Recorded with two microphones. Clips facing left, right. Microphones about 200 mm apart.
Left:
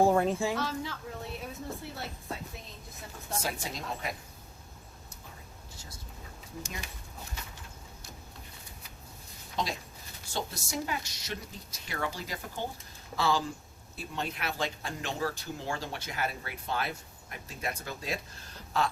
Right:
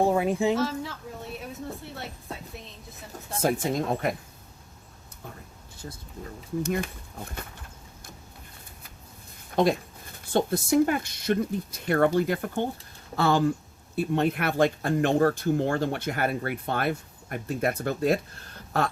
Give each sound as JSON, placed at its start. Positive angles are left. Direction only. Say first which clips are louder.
{"t": 0.0, "sound": "speech", "louder": "right 1 dB", "side_deg": 0}
{"t": 0.3, "sound": "speech", "louder": "right 6 dB", "side_deg": -20}
{"t": 0.6, "sound": "speech", "louder": "right 6 dB", "side_deg": 0}
{"t": 3.4, "sound": "speech", "louder": "right 16 dB", "side_deg": -50}
{"t": 5.7, "sound": "a sound", "louder": "right 12 dB", "side_deg": -55}
{"t": 6.6, "sound": "speech", "louder": "right 14 dB", "side_deg": -55}
{"t": 9.5, "sound": "speech", "louder": "right 12 dB", "side_deg": -55}